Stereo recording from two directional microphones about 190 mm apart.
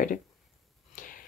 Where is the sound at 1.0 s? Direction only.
45° left (ahead or behind).